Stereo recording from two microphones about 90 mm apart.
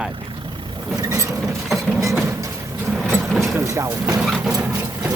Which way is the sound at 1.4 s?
Centre (ahead or behind).